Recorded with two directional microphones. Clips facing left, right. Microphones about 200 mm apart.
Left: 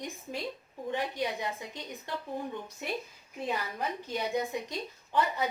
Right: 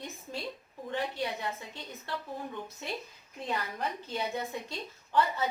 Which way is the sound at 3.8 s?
15° left (ahead or behind).